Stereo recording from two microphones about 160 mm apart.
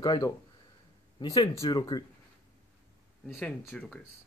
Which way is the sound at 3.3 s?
5° left (ahead or behind).